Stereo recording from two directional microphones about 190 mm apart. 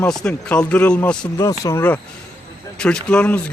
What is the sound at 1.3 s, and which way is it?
Speech, 15° left (ahead or behind).